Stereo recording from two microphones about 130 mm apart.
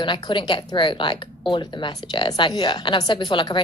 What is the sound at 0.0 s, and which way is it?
Speech, 40° left (ahead or behind).